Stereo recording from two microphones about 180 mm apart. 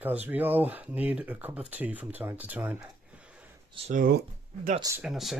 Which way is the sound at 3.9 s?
55° right (ahead or behind).